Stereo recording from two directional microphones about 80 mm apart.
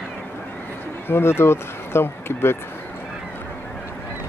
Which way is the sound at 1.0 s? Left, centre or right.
Left.